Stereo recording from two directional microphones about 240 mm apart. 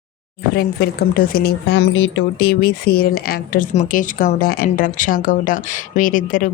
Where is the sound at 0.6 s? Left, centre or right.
Left.